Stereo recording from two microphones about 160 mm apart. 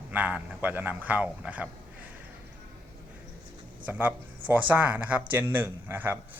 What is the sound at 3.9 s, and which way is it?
Speech, 10° right (ahead or behind).